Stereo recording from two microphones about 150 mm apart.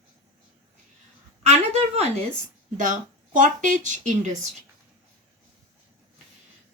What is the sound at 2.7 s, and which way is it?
Speech, 60° right (ahead or behind).